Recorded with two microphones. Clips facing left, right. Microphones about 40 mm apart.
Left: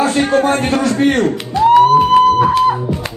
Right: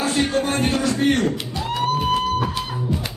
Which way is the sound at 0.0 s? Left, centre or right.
Left.